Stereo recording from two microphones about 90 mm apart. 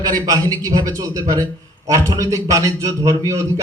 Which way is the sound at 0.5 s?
45° right (ahead or behind).